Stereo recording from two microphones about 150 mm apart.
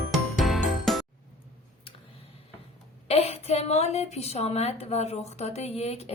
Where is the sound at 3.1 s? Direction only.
45° left (ahead or behind).